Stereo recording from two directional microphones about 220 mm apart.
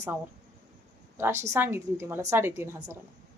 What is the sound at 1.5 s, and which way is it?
Speech, 10° right (ahead or behind).